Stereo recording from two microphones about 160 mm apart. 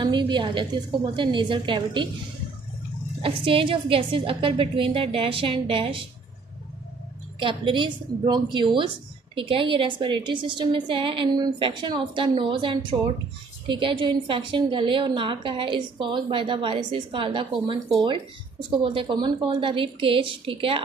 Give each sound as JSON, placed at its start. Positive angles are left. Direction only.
{"t": 0.0, "sound": "a woman's voice", "side_deg": -30}
{"t": 3.2, "sound": "a woman's voice", "side_deg": -35}
{"t": 7.3, "sound": "a woman's voice", "side_deg": -30}